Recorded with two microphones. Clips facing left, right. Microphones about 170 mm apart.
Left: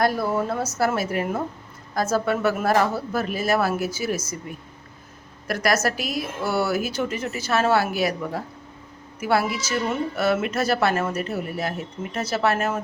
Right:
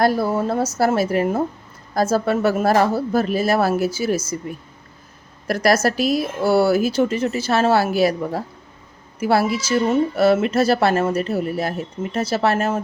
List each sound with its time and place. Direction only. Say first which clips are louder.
0.0 s a woman's voice: right 4 dB; 30° right (ahead or behind)
5.5 s a woman's voice: right 5 dB; 35° right (ahead or behind)